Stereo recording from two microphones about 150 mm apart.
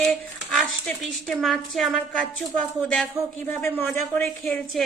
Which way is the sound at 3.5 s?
15° left (ahead or behind).